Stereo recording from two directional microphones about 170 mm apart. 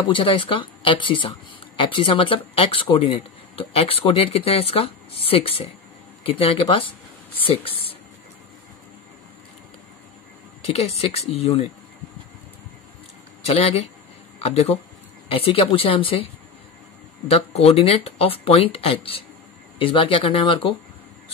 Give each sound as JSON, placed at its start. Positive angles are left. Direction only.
{"t": 0.0, "sound": "speech", "side_deg": 30}
{"t": 10.7, "sound": "speech", "side_deg": 35}
{"t": 13.5, "sound": "speech", "side_deg": 35}
{"t": 17.3, "sound": "speech", "side_deg": 35}